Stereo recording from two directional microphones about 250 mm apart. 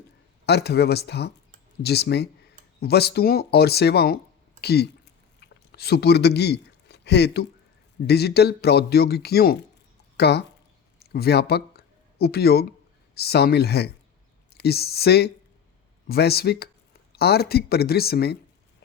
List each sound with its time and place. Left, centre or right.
0.4 s speech: left
5.4 s a sound: left
8.0 s speech: left